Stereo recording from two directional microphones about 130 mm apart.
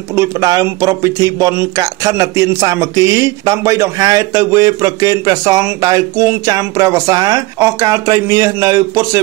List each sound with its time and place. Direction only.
0.1 s speech: 25° right (ahead or behind)